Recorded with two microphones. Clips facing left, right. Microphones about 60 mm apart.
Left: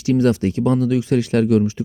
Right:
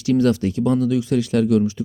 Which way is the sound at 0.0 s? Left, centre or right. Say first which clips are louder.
Left 1 dB; left.